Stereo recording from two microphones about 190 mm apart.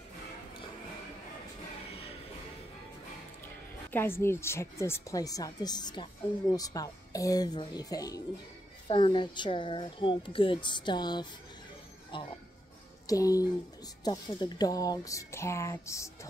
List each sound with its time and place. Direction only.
3.9 s speech: 10° left (ahead or behind)
13.0 s speech: 20° left (ahead or behind)